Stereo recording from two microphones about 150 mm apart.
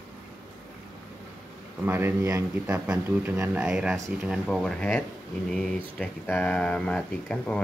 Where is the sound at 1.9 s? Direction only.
15° right (ahead or behind).